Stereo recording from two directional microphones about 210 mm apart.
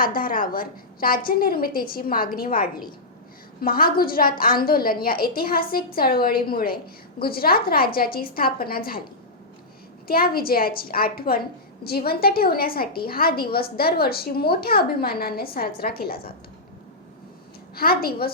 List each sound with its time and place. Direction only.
0.0 s a woman's voice: 40° left (ahead or behind)
10.1 s a woman's voice: 45° left (ahead or behind)
17.7 s a woman's voice: 45° left (ahead or behind)